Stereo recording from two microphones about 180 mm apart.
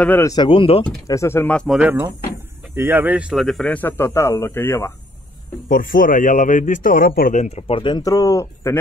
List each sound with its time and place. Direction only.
0.0 s speech: 10° left (ahead or behind)
0.3 s speech: 25° left (ahead or behind)
1.0 s speech: 15° left (ahead or behind)
1.8 s speech: 10° right (ahead or behind); by 4.9 s 10° left (ahead or behind)
5.7 s a man's voice: 50° left (ahead or behind); by 8.7 s 15° left (ahead or behind)